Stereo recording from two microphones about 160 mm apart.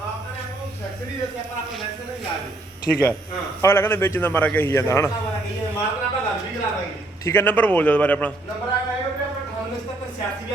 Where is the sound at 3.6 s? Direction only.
15° left (ahead or behind).